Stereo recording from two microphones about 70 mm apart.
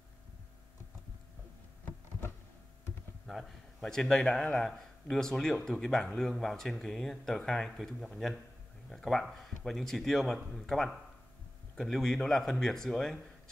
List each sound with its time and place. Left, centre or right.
1.9 s insect: left
3.3 s a man's voice: centre